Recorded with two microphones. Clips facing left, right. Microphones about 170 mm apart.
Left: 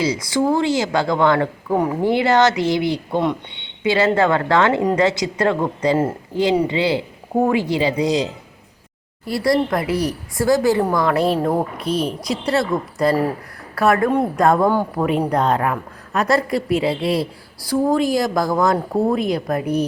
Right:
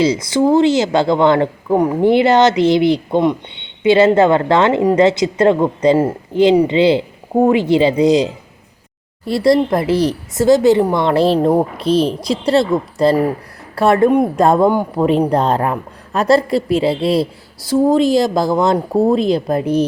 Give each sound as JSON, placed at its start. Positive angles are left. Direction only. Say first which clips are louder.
{"t": 0.0, "sound": "a woman's voice", "louder": "right 5 dB", "side_deg": -25}
{"t": 11.3, "sound": "a woman's voice", "louder": "right 6 dB", "side_deg": -20}
{"t": 11.8, "sound": "a woman's voice", "louder": "right 7 dB", "side_deg": -30}
{"t": 14.7, "sound": "a man's voice", "louder": "right 3 dB", "side_deg": -15}
{"t": 15.3, "sound": "a woman's voice", "louder": "right 3 dB", "side_deg": -30}